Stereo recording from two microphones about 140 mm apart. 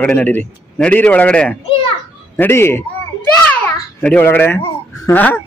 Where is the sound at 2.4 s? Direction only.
15° left (ahead or behind).